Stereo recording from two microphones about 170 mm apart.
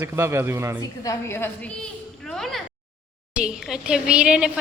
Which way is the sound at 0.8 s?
20° left (ahead or behind).